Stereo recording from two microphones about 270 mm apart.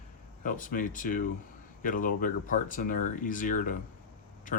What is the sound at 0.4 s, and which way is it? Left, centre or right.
Speech, left.